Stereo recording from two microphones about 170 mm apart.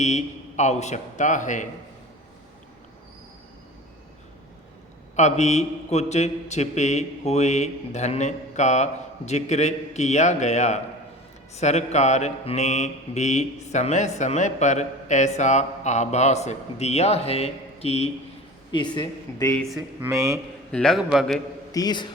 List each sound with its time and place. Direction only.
0.0 s mantra: 40° left (ahead or behind)
5.1 s mantra: 40° left (ahead or behind)
18.7 s speech: 25° left (ahead or behind)
20.0 s a man's voice: 15° right (ahead or behind)
20.7 s a man's voice: centre (ahead or behind)
21.7 s a man's voice: 25° left (ahead or behind)